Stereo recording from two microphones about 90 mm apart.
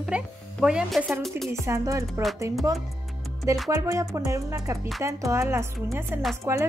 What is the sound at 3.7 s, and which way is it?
Music, 40° right (ahead or behind).